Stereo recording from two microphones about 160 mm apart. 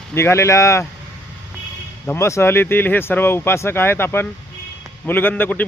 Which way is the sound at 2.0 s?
15° left (ahead or behind).